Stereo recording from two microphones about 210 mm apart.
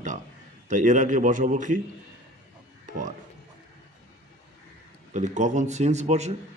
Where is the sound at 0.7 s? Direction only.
35° right (ahead or behind).